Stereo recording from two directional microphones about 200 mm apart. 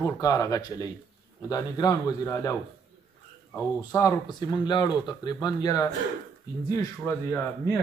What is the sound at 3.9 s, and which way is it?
A man's voice, 15° left (ahead or behind).